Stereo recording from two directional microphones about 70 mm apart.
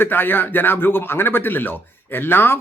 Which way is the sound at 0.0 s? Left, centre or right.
Left.